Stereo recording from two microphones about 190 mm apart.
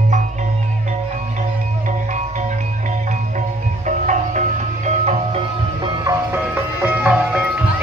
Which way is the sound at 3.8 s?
40° right (ahead or behind).